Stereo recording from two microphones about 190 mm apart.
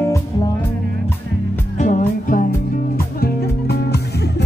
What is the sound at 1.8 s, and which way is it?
Music, 45° left (ahead or behind).